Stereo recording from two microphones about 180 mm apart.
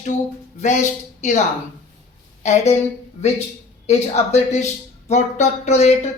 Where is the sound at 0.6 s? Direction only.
40° left (ahead or behind).